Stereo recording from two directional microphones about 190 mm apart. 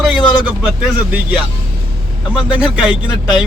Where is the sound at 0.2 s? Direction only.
25° left (ahead or behind).